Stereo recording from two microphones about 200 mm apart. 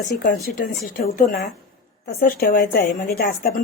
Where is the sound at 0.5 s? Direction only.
50° left (ahead or behind).